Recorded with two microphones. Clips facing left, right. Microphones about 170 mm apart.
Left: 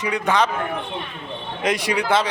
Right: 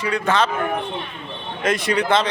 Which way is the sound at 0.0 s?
15° left (ahead or behind).